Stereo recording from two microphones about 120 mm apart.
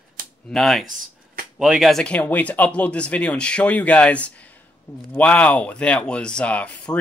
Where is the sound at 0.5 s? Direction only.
5° left (ahead or behind).